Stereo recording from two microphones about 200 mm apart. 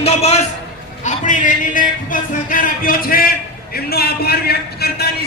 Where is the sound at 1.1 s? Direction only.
40° left (ahead or behind).